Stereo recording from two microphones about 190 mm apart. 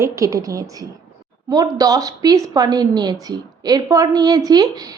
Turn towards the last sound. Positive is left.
turn(degrees=-20)  # may be behind; listen again after turning